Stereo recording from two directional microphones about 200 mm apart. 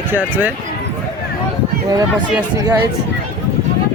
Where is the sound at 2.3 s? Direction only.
15° right (ahead or behind).